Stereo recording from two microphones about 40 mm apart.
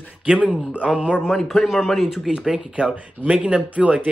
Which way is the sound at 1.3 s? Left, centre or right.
Centre.